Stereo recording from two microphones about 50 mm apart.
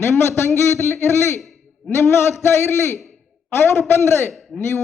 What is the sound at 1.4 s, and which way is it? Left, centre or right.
Owl, centre.